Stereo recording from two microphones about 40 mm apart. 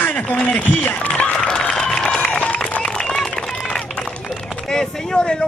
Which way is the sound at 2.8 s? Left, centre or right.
Left.